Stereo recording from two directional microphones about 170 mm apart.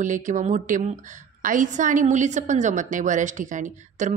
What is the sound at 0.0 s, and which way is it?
A woman's voice, 50° right (ahead or behind).